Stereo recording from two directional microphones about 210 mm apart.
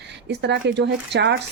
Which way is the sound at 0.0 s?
55° right (ahead or behind).